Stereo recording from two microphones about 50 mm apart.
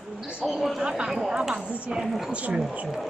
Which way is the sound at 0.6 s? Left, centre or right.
Centre.